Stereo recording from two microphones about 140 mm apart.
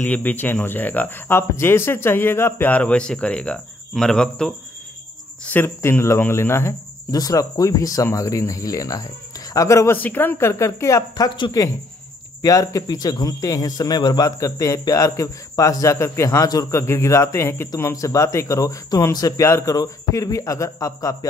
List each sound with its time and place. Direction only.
0.0 s a man's voice: 10° left (ahead or behind)